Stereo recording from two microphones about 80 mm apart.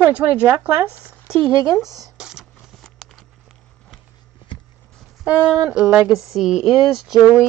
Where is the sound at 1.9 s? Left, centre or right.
Right.